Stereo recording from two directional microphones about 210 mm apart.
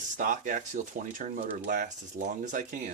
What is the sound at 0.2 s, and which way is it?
Speech, 40° right (ahead or behind).